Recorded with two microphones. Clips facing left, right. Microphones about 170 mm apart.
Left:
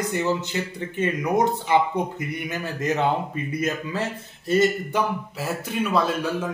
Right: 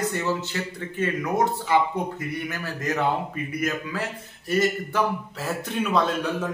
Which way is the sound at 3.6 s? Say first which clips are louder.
Left 2 dB; 25° left (ahead or behind).